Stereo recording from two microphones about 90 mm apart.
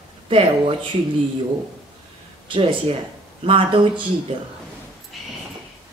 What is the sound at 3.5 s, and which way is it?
Speech, 70° right (ahead or behind).